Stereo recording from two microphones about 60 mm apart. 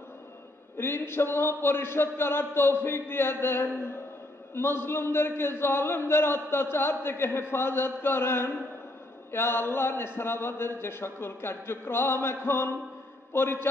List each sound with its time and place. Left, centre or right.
0.7 s a man's voice: left